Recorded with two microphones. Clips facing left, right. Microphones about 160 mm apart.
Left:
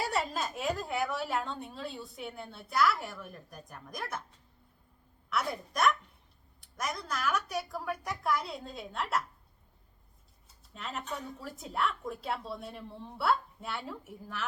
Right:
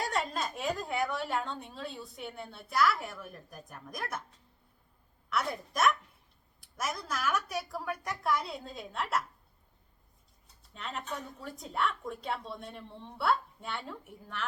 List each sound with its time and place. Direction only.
0.0 s a woman's voice: 5° left (ahead or behind)
5.3 s a woman's voice: centre (ahead or behind)
10.8 s a woman's voice: centre (ahead or behind)